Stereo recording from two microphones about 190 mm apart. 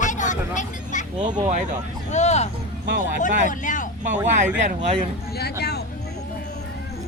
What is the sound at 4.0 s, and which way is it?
Speech, 40° right (ahead or behind).